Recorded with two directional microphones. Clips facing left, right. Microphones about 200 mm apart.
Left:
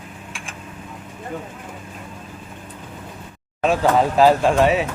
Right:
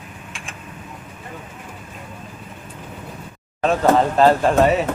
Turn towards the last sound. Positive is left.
turn(degrees=0)  # may be behind; listen again after turning